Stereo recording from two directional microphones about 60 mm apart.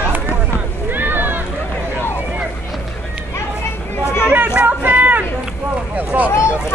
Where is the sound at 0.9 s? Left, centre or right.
Right.